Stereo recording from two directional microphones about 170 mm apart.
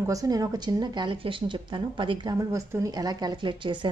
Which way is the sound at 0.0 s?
20° right (ahead or behind).